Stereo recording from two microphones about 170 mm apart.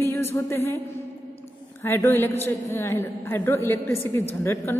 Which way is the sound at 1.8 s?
15° left (ahead or behind).